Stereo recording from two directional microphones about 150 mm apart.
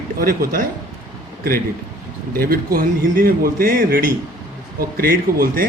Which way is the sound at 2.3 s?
75° right (ahead or behind).